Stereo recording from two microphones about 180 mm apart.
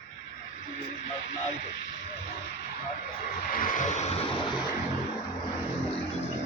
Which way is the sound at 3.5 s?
45° left (ahead or behind).